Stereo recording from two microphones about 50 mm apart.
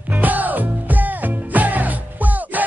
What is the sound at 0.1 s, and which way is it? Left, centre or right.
Music, right.